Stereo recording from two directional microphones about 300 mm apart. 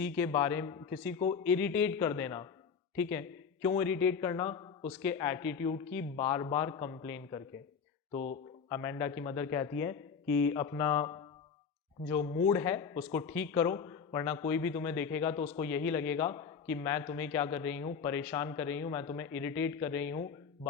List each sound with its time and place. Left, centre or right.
0.0 s a man's voice: centre
8.8 s a man's voice: centre